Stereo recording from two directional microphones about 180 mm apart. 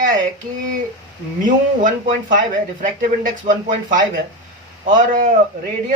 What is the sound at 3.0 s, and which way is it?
Speech, 45° right (ahead or behind).